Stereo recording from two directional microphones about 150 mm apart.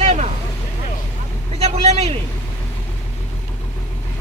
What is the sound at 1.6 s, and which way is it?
Speech, 45° right (ahead or behind).